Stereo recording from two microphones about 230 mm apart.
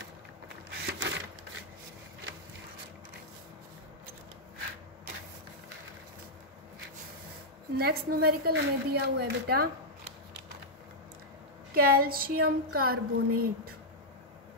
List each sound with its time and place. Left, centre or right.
0.7 s a sound: right
7.7 s a woman's voice: right
11.7 s speech: right